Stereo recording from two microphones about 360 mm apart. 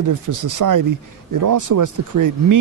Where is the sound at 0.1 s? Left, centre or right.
Right.